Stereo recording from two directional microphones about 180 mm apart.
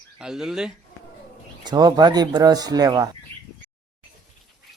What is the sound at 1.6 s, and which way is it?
Speech, 20° right (ahead or behind).